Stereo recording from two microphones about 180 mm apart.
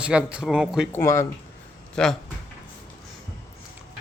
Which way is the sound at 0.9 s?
15° left (ahead or behind).